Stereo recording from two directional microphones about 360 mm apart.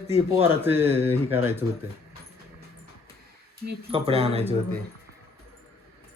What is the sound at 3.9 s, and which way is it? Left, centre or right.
Speech, centre.